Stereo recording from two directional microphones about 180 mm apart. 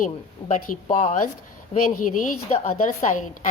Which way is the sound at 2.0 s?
50° left (ahead or behind).